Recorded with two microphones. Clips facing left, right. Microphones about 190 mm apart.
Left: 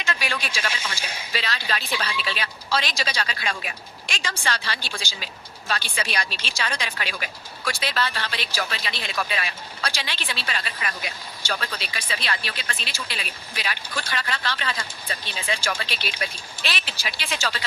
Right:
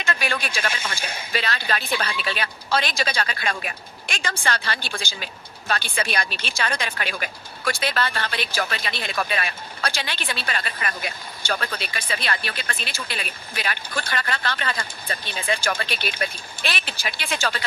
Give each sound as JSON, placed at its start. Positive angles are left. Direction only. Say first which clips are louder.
{"t": 0.0, "sound": "speech", "louder": "right 3 dB", "side_deg": -55}